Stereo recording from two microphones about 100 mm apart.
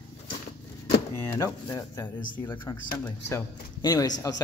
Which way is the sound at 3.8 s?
40° left (ahead or behind).